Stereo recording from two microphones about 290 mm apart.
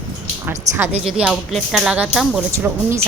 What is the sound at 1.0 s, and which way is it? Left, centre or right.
A woman's voice, centre.